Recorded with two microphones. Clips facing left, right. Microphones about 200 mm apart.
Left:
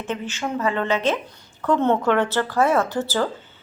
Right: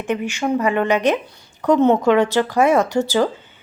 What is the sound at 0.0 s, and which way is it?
A woman's voice, 15° right (ahead or behind).